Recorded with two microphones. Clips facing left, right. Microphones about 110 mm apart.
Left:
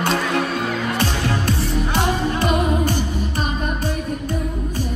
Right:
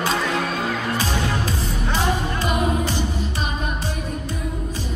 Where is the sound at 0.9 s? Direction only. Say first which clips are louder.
Left 2 dB; 65° left (ahead or behind).